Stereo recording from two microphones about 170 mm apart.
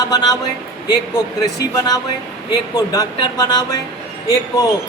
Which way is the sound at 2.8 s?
20° left (ahead or behind).